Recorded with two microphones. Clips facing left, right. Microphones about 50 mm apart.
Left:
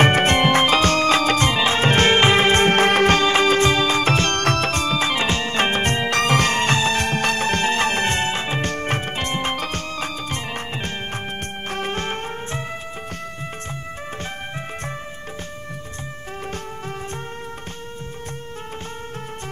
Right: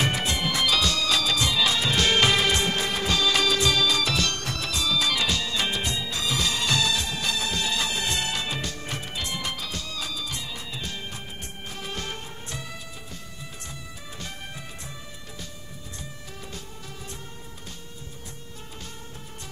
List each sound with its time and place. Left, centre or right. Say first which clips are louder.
0.0 s music: left 10 dB; left
4.4 s music: left 10 dB; left
7.0 s music: left 8 dB; left